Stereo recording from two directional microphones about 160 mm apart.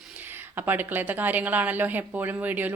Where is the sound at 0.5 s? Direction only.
10° right (ahead or behind).